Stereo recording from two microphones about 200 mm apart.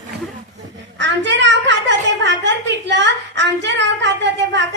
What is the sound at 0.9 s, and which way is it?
A woman's voice, 60° right (ahead or behind).